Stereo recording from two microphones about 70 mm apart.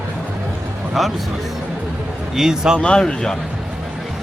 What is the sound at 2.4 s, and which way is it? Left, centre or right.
Speech, centre.